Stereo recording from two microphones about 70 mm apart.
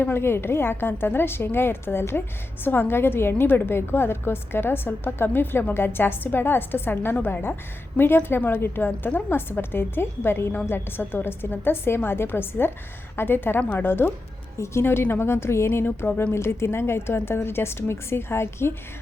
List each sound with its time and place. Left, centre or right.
0.0 s a woman's voice: left